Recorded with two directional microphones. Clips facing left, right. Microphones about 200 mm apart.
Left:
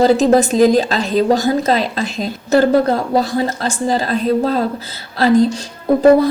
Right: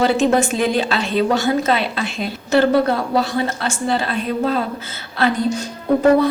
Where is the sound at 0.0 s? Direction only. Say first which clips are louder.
Left 4 dB; 40° left (ahead or behind).